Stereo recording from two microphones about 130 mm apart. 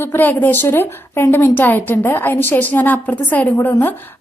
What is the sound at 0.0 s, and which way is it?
A woman's voice, 15° left (ahead or behind).